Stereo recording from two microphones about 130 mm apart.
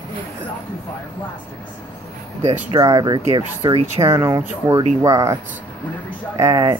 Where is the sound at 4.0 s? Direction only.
25° right (ahead or behind).